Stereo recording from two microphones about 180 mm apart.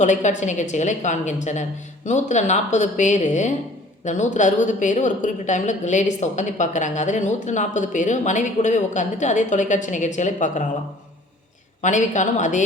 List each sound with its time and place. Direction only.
0.0 s a woman's voice: 40° left (ahead or behind)
11.8 s a woman's voice: 45° left (ahead or behind)